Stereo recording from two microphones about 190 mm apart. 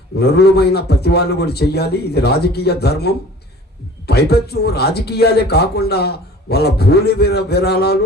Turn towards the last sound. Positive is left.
turn(degrees=60)  # may be behind; listen again after turning